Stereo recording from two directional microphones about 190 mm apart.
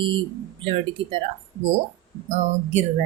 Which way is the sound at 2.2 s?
35° right (ahead or behind).